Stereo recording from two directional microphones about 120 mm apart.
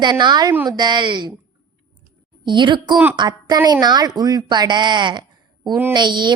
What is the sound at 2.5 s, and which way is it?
A woman's voice, 40° right (ahead or behind).